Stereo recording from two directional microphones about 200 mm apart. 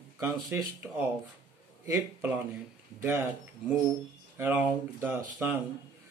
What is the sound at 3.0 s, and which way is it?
Speech, 10° right (ahead or behind).